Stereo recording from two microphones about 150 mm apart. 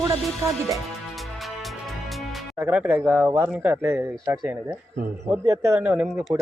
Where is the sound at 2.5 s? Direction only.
10° right (ahead or behind).